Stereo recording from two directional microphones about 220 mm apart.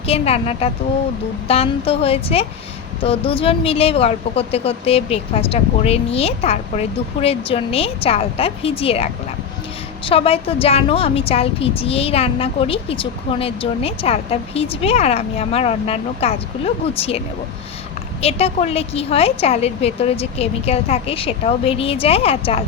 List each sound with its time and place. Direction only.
0.1 s a woman's voice: 25° left (ahead or behind)
10.1 s a woman's voice: 25° left (ahead or behind)